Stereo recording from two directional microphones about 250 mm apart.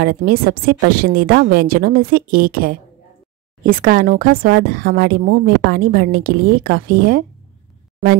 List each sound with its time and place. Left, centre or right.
0.0 s a woman's voice: right